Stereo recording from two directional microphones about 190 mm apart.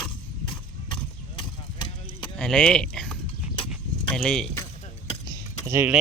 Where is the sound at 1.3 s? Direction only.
25° left (ahead or behind).